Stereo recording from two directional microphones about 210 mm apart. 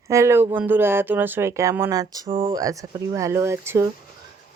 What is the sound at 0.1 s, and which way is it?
Speech, 15° right (ahead or behind).